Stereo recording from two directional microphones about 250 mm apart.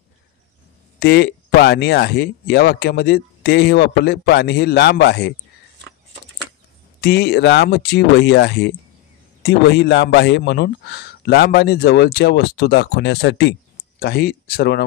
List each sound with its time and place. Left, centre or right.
0.9 s a man's voice: left
7.0 s a man's voice: left